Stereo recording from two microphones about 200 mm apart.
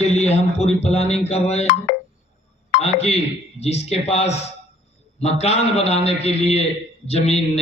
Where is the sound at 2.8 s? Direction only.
30° left (ahead or behind).